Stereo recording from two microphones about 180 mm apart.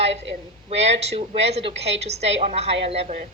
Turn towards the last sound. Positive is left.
turn(degrees=-35)  # may be behind; listen again after turning